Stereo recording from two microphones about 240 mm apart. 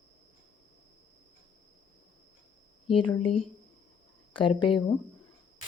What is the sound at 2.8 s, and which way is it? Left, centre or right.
Speech, left.